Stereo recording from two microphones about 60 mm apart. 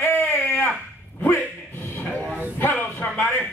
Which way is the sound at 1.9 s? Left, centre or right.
Left.